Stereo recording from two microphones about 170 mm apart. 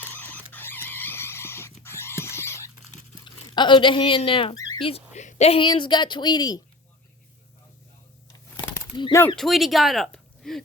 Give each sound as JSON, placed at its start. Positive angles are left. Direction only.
{"t": 0.1, "sound": "a sound", "side_deg": 10}
{"t": 3.2, "sound": "speech", "side_deg": 25}
{"t": 4.9, "sound": "speech", "side_deg": 40}
{"t": 8.9, "sound": "speech", "side_deg": 30}
{"t": 9.3, "sound": "speech", "side_deg": 0}